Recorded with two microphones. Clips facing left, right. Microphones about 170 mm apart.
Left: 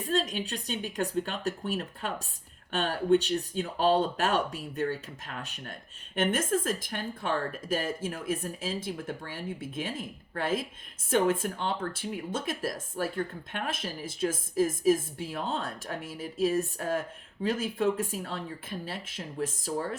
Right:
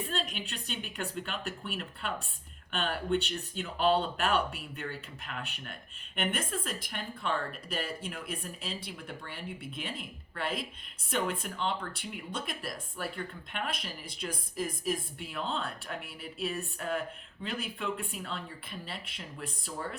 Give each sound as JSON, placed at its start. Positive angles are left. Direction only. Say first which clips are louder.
{"t": 0.1, "sound": "speech", "louder": "left 7 dB", "side_deg": 40}